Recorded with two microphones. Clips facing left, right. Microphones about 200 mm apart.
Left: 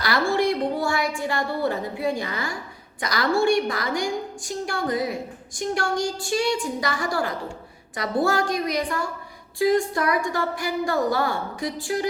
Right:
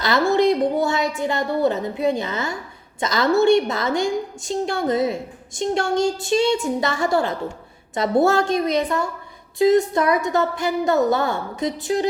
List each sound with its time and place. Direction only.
0.0 s a woman's voice: 20° right (ahead or behind)